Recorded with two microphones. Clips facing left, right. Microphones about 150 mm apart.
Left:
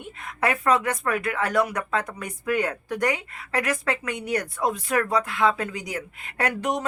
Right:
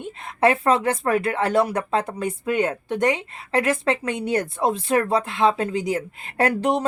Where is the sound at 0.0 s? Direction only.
25° right (ahead or behind).